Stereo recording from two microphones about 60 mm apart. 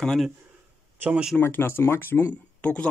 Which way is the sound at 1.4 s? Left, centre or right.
Left.